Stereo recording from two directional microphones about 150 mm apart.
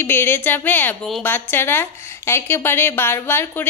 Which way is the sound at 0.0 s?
15° left (ahead or behind).